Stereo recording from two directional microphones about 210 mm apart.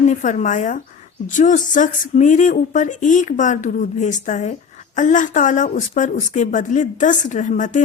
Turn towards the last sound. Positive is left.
turn(degrees=35)  # may be behind; listen again after turning